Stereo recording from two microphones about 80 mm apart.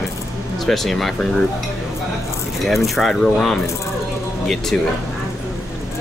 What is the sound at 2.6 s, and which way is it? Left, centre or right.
Speech, centre.